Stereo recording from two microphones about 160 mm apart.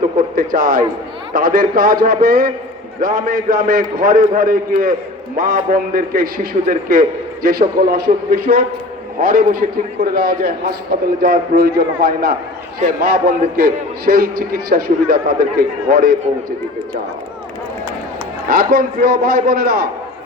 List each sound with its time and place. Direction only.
0.2 s a man's voice: 60° right (ahead or behind)
18.4 s a man's voice: 65° right (ahead or behind)